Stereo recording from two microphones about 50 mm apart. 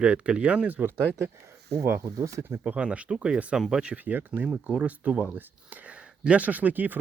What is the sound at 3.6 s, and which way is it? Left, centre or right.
Speech, centre.